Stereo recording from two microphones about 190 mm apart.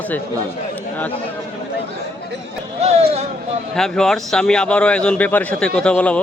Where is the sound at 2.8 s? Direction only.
35° right (ahead or behind).